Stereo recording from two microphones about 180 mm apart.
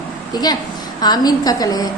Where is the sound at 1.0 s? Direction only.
20° left (ahead or behind).